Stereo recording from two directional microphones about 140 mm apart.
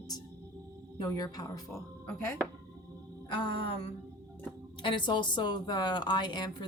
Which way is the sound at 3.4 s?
40° left (ahead or behind).